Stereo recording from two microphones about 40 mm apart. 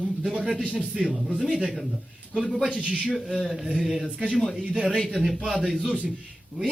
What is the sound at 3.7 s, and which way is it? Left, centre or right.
Speech, centre.